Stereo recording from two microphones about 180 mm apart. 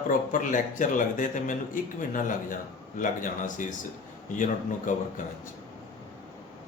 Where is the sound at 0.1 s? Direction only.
45° left (ahead or behind).